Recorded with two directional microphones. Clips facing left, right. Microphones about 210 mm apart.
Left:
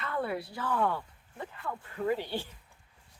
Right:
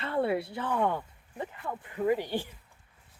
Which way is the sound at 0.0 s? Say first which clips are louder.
Right 5 dB; 30° right (ahead or behind).